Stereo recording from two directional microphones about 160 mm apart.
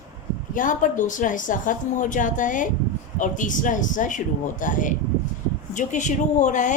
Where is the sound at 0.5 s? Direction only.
55° left (ahead or behind).